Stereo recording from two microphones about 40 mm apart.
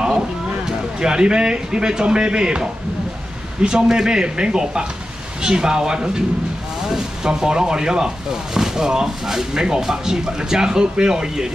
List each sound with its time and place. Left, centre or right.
0.7 s speech: centre
7.2 s speech: centre